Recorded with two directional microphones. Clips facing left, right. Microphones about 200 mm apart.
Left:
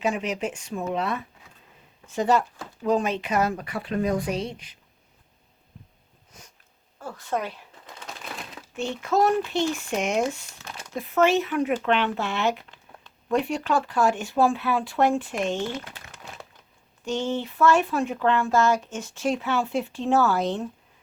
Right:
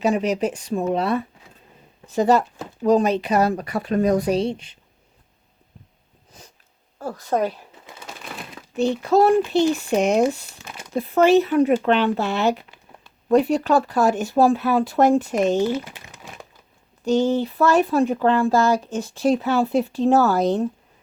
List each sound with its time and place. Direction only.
0.0 s speech: 40° right (ahead or behind)
6.3 s sniff: 30° right (ahead or behind)
7.0 s speech: 40° right (ahead or behind)
7.9 s a sound: 5° right (ahead or behind)
9.0 s speech: 35° right (ahead or behind)
10.6 s a sound: 5° right (ahead or behind)
10.9 s speech: 35° right (ahead or behind)
12.6 s a sound: 10° right (ahead or behind)
13.2 s speech: 35° right (ahead or behind)
15.6 s speech: 5° right (ahead or behind)
15.9 s crumpling: 15° right (ahead or behind)
17.0 s speech: 35° right (ahead or behind)